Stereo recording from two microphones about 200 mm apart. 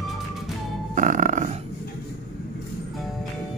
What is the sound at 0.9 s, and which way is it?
Music, 40° right (ahead or behind).